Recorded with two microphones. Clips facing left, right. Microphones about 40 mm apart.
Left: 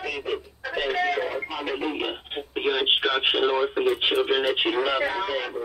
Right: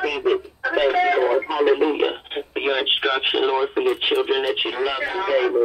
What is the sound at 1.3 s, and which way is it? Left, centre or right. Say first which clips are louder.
Radio: right 9 dB; right.